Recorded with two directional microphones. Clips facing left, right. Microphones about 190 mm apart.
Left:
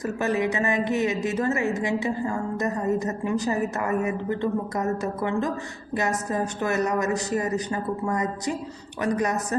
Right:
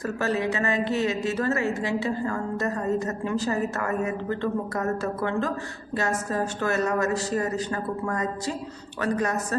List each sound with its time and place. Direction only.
0.0 s a woman's voice: 15° left (ahead or behind)